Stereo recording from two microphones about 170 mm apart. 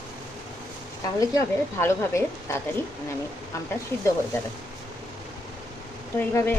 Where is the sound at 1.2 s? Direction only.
20° left (ahead or behind).